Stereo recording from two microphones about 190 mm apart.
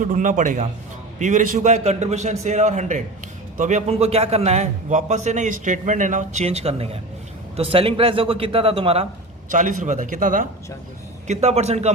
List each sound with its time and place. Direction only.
0.0 s a man's voice: 40° right (ahead or behind)
9.5 s speech: 45° right (ahead or behind)
11.3 s a man's voice: 35° right (ahead or behind)